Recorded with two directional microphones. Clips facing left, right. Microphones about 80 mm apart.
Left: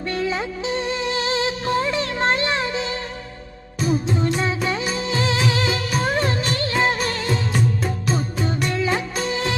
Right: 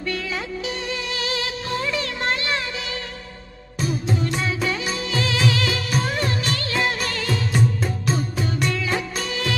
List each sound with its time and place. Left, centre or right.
0.0 s music: left